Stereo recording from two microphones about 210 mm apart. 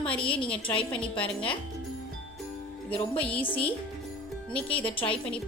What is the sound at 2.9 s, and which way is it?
Speech, 25° left (ahead or behind).